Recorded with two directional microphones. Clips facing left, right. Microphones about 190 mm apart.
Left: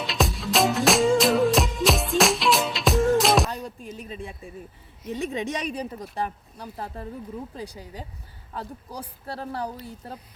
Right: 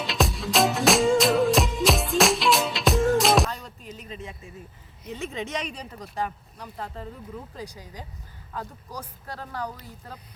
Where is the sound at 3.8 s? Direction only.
50° left (ahead or behind).